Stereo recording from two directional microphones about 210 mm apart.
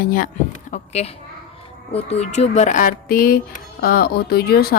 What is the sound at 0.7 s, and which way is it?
Speech, 30° left (ahead or behind).